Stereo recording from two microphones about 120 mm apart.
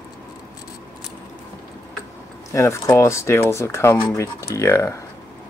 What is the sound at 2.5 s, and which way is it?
Speech, 25° left (ahead or behind).